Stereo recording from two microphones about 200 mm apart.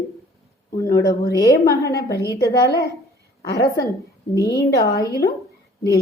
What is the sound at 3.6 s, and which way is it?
A woman's voice, 15° left (ahead or behind).